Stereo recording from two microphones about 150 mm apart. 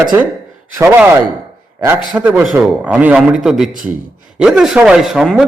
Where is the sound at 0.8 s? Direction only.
15° right (ahead or behind).